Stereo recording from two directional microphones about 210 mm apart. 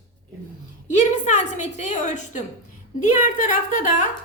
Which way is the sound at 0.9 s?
35° left (ahead or behind).